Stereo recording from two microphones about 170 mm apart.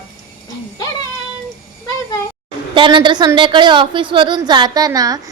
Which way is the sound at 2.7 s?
25° right (ahead or behind).